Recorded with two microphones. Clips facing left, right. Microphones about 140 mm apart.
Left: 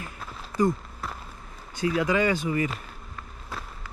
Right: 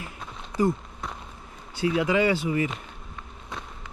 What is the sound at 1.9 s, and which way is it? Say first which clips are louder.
Speech: right 1 dB; 20° right (ahead or behind).